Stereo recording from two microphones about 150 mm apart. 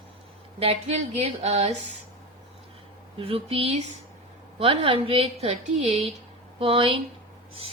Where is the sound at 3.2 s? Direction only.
40° right (ahead or behind).